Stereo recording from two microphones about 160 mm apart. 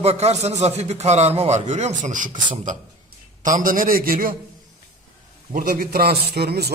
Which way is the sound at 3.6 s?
60° right (ahead or behind).